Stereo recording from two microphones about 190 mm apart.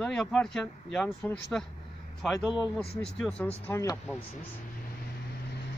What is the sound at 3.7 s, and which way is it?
Speech, 15° left (ahead or behind).